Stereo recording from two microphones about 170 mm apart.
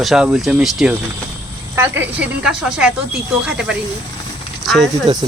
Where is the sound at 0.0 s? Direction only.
Centre (ahead or behind).